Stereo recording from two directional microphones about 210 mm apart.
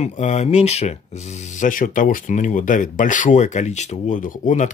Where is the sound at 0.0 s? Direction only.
35° left (ahead or behind).